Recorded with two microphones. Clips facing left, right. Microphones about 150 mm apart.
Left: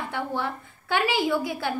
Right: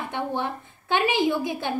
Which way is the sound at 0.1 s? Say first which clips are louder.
Right 2 dB; 20° right (ahead or behind).